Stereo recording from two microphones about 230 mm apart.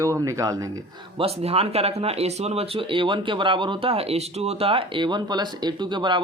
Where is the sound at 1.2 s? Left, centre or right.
Right.